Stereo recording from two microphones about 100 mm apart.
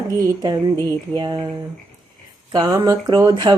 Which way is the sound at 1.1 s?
50° right (ahead or behind).